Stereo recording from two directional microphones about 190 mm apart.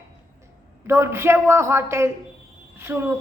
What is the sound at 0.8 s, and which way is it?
A woman's voice, 15° right (ahead or behind).